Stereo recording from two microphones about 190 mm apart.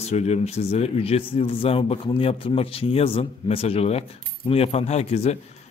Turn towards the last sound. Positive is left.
turn(degrees=35)  # may be behind; listen again after turning